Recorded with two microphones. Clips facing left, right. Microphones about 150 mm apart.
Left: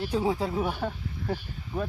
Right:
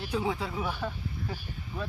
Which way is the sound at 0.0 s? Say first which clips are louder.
Left 4 dB; 40° left (ahead or behind).